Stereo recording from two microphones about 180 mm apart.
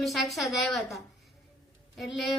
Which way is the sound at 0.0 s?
Centre (ahead or behind).